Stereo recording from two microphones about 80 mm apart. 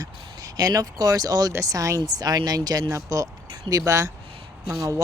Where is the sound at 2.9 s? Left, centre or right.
Right.